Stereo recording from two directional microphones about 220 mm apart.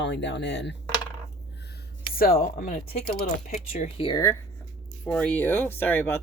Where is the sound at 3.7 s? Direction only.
25° left (ahead or behind).